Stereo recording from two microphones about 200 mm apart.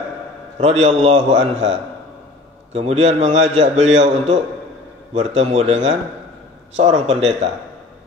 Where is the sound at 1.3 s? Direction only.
70° right (ahead or behind).